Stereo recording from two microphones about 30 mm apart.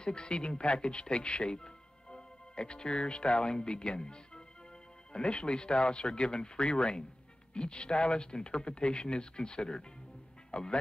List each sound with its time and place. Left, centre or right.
0.0 s speech: left
10.5 s speech: left